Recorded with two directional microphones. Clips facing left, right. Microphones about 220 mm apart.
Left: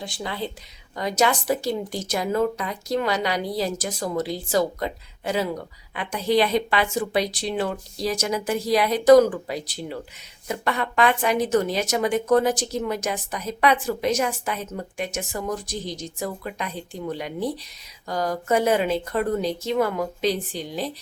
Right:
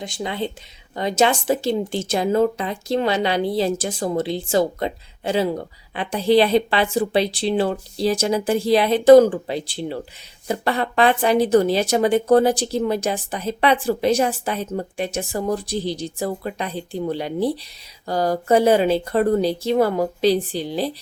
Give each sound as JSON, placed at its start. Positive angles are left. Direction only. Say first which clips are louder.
{"t": 0.0, "sound": "a woman's voice", "louder": "right 4 dB", "side_deg": -20}